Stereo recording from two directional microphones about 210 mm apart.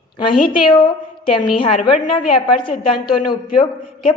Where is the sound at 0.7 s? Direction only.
25° left (ahead or behind).